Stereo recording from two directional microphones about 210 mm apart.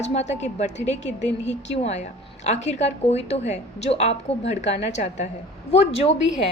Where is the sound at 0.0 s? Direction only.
30° left (ahead or behind).